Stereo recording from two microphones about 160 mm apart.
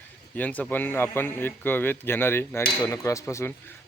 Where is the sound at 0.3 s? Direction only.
10° left (ahead or behind).